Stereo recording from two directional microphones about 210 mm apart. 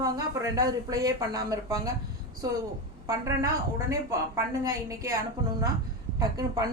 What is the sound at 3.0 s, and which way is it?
Speech, 15° right (ahead or behind).